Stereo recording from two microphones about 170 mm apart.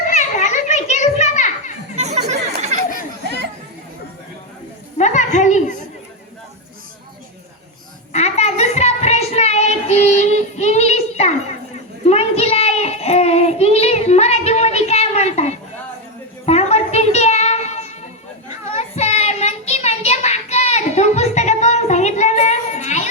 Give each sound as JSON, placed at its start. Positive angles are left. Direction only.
{"t": 0.0, "sound": "children playing", "side_deg": 45}
{"t": 2.0, "sound": "music", "side_deg": -40}
{"t": 2.9, "sound": "children playing", "side_deg": -75}
{"t": 4.9, "sound": "a sound", "side_deg": 45}
{"t": 8.1, "sound": "child singing", "side_deg": 40}